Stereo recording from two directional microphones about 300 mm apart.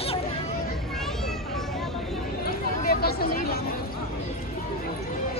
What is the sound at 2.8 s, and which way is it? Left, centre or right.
Speech, left.